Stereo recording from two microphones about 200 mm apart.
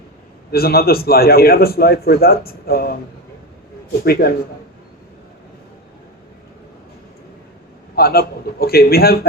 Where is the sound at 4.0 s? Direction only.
50° left (ahead or behind).